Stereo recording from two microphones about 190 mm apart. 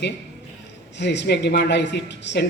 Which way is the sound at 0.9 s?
65° left (ahead or behind).